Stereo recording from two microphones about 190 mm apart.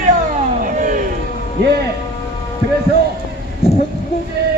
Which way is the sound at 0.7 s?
40° right (ahead or behind).